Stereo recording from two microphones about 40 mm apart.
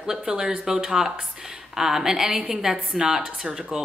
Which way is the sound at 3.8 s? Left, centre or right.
Centre.